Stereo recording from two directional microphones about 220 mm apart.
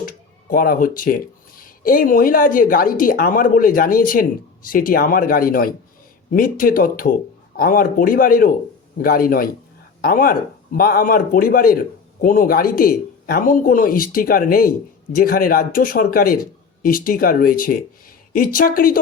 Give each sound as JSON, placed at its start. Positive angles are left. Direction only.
{"t": 0.5, "sound": "speech", "side_deg": 40}